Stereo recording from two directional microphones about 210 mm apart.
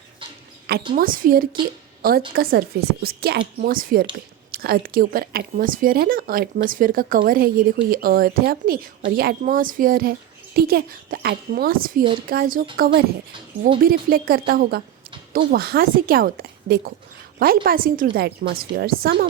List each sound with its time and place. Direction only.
0.9 s a woman's voice: 40° right (ahead or behind)
12.9 s speech: 25° right (ahead or behind)
13.8 s a woman's voice: 45° right (ahead or behind)